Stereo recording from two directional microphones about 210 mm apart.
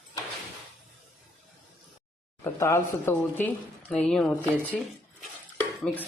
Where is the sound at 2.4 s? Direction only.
10° left (ahead or behind).